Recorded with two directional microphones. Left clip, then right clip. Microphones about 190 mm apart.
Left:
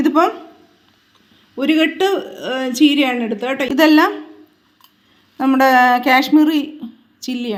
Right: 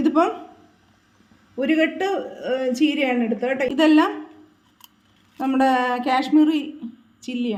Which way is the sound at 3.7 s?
30° left (ahead or behind).